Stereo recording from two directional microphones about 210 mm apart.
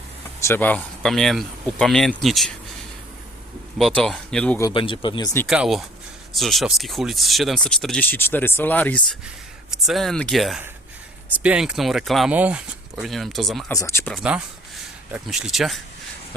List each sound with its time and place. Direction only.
0.4 s speech: 10° left (ahead or behind)
3.8 s speech: centre (ahead or behind)
4.7 s speech: 25° left (ahead or behind)
5.5 s speech: centre (ahead or behind)
13.7 s speech: 10° left (ahead or behind)
14.1 s speech: 5° right (ahead or behind)